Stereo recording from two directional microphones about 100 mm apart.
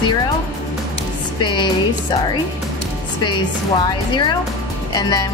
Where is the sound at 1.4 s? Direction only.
50° left (ahead or behind).